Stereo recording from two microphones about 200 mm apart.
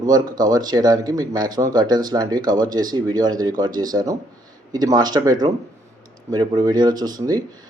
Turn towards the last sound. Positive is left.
turn(degrees=-20)  # may be behind; listen again after turning